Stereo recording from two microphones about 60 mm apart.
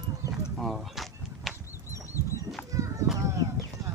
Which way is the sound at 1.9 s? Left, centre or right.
Left.